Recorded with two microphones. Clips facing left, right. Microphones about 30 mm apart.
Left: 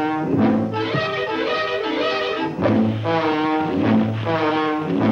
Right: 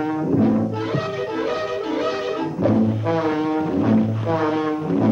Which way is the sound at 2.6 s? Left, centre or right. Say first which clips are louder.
Even; left.